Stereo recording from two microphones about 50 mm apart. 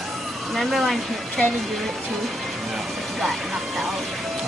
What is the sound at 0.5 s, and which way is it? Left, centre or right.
Speech, centre.